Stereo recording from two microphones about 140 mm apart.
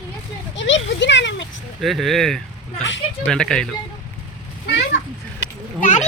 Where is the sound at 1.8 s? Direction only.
Centre (ahead or behind).